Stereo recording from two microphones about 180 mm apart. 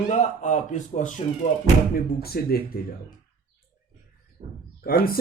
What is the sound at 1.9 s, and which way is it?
Speech, 60° left (ahead or behind).